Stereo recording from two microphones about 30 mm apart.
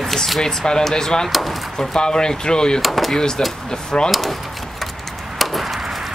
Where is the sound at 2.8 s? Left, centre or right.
Centre.